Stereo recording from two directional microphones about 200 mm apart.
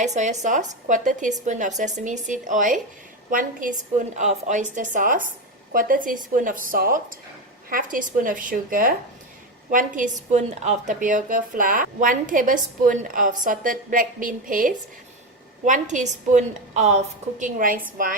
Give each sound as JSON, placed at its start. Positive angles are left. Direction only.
{"t": 0.0, "sound": "a woman's voice", "side_deg": -35}